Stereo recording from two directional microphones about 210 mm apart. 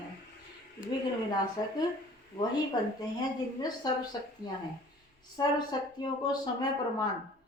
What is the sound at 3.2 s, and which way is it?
Speech, 20° left (ahead or behind).